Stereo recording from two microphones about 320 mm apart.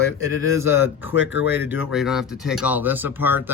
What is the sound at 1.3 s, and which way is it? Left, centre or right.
Speech, left.